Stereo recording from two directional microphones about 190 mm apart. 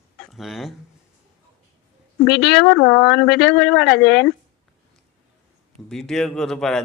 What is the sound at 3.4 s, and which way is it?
Speech, 60° left (ahead or behind).